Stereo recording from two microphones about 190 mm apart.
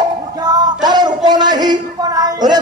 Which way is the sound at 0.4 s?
20° right (ahead or behind).